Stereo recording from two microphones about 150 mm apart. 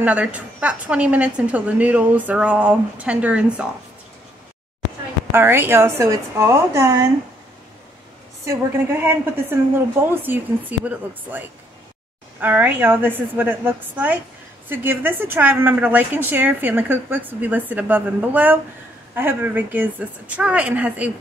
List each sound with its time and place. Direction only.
0.0 s a woman's voice: 10° right (ahead or behind)
5.3 s a woman's voice: 15° right (ahead or behind)
8.5 s a woman's voice: 15° right (ahead or behind)